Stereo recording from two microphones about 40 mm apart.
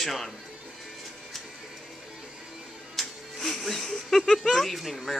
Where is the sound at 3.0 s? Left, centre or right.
Centre.